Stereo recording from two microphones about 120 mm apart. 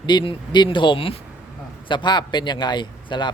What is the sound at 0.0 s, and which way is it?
A man's voice, 35° left (ahead or behind).